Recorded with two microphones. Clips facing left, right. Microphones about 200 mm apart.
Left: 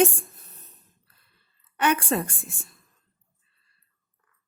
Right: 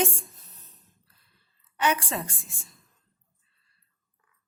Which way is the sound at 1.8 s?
60° left (ahead or behind).